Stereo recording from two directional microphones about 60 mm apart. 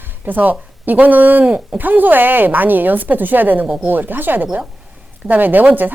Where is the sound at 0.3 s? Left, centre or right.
Right.